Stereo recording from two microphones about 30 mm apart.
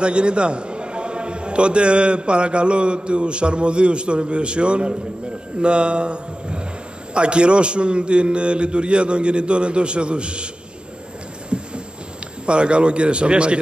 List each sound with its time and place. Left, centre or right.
0.0 s a man's voice: right
11.5 s a sound: right
12.4 s a man's voice: right